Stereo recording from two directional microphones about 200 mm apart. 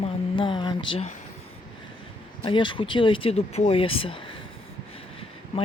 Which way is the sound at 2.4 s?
25° left (ahead or behind).